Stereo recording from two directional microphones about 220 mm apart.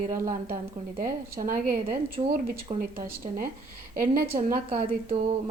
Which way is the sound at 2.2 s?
25° right (ahead or behind).